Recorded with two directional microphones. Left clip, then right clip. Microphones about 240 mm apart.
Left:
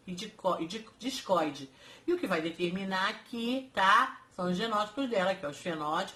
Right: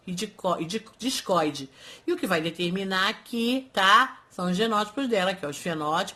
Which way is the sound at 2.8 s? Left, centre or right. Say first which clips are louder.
Right 8 dB; right.